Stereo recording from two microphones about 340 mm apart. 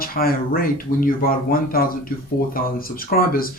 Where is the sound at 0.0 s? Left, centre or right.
Left.